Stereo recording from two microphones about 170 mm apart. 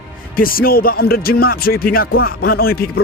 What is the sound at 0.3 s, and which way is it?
A man's voice, 60° left (ahead or behind).